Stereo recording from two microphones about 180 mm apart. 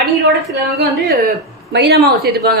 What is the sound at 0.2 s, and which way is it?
A woman's voice, 65° right (ahead or behind).